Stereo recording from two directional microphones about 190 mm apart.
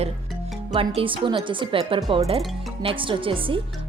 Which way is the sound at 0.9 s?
25° right (ahead or behind).